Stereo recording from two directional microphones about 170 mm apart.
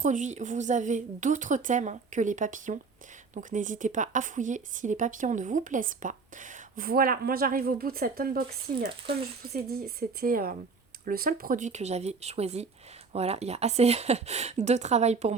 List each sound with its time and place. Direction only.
0.0 s a woman's voice: 45° right (ahead or behind)